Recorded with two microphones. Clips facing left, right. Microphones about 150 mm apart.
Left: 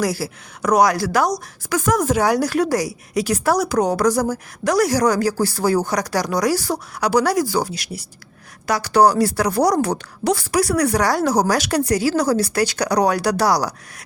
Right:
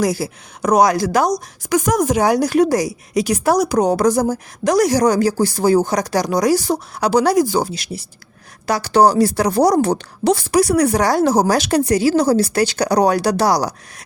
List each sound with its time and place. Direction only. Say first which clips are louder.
0.0 s a woman's voice: right 3 dB; 20° right (ahead or behind)